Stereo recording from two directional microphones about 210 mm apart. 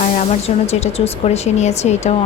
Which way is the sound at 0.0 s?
35° left (ahead or behind).